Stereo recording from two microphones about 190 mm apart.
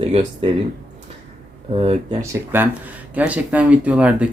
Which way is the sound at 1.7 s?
30° right (ahead or behind).